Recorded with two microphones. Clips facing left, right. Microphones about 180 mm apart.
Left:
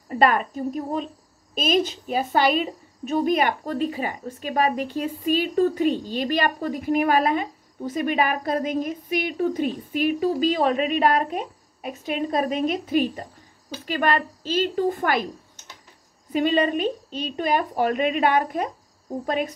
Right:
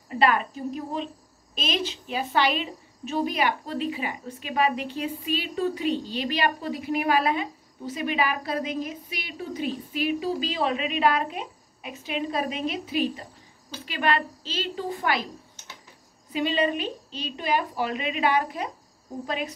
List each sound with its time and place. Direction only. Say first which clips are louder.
0.1 s a woman's voice: left 3 dB; 45° left (ahead or behind)
16.3 s a woman's voice: left 4 dB; 50° left (ahead or behind)